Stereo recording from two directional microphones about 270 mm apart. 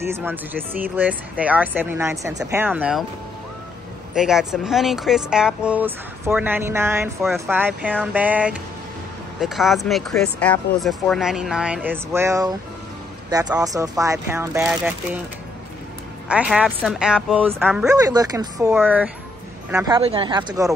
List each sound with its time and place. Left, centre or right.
0.1 s speech: centre
4.1 s speech: centre
16.3 s speech: centre
19.9 s speech: centre